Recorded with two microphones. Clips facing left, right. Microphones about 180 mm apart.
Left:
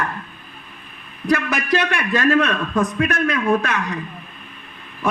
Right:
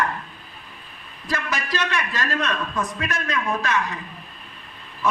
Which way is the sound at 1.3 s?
55° left (ahead or behind).